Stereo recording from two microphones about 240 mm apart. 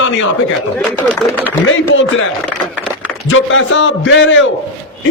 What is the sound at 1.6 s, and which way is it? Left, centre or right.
Speech, left.